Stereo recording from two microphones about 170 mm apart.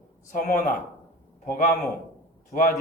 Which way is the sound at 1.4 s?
50° left (ahead or behind).